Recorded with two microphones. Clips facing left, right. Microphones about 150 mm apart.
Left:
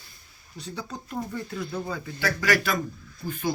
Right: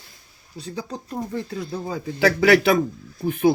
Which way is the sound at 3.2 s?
65° right (ahead or behind).